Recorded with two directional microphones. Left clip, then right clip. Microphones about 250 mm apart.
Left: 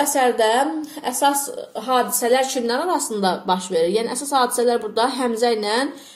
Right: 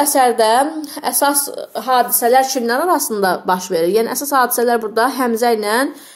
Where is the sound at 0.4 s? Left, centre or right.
Right.